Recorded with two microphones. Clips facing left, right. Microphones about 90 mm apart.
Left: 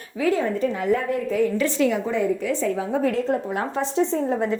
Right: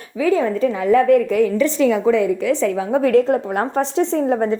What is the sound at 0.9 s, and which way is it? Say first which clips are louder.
Speech: right 13 dB; 80° right.